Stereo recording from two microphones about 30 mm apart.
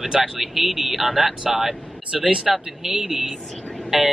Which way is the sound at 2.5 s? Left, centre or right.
Centre.